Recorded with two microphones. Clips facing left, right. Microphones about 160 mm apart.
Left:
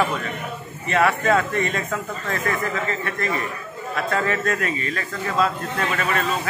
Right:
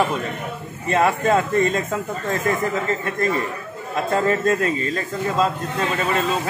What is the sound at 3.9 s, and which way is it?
Speech, 20° right (ahead or behind).